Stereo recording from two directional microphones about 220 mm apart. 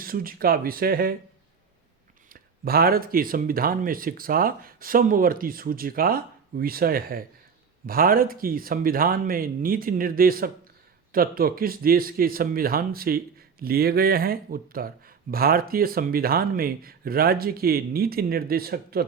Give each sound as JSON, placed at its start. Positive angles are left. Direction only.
{"t": 0.0, "sound": "speech", "side_deg": -40}
{"t": 2.3, "sound": "speech", "side_deg": -45}